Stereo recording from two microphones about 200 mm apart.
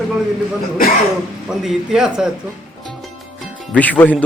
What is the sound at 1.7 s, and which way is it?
Speech, 5° right (ahead or behind).